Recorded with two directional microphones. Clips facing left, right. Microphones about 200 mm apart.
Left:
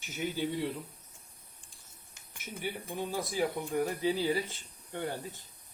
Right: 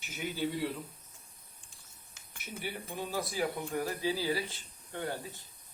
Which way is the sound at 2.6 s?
15° left (ahead or behind).